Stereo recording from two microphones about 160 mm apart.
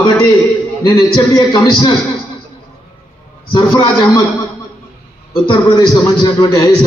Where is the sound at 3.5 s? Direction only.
25° left (ahead or behind).